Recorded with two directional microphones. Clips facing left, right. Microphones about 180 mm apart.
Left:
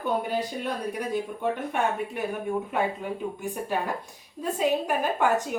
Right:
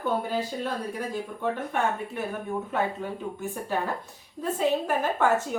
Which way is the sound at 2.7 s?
15° left (ahead or behind).